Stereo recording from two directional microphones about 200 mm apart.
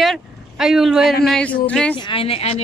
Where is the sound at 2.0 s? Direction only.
25° left (ahead or behind).